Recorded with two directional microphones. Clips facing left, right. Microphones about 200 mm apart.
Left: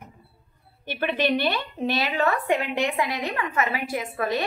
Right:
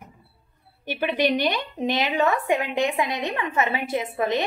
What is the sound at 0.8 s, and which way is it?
A woman's voice, 15° right (ahead or behind).